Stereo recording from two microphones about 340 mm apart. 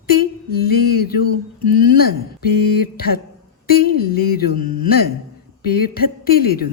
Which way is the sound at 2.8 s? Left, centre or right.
Left.